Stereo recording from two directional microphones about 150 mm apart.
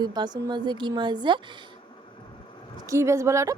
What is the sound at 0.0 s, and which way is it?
Speech, 30° right (ahead or behind).